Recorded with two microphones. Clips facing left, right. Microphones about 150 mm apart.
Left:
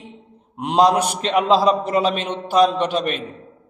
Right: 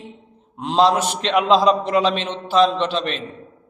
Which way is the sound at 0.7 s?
10° left (ahead or behind).